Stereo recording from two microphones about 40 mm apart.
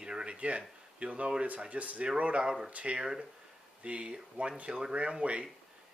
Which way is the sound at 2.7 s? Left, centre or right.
Right.